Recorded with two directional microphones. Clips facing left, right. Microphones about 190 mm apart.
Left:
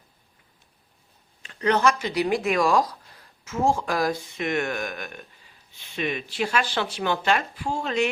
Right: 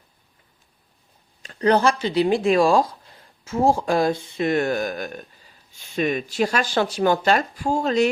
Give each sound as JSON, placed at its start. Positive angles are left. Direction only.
{"t": 1.4, "sound": "speech", "side_deg": -35}